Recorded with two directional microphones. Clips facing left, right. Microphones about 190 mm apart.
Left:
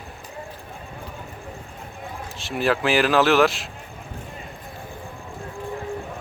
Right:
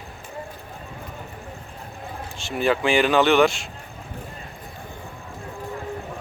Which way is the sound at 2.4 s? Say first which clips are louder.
Right 1 dB; centre (ahead or behind).